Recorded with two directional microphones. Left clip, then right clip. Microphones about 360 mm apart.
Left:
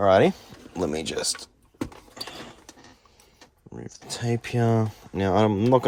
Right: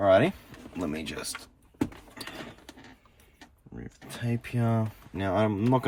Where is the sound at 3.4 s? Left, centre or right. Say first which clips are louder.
Left 4 dB; centre.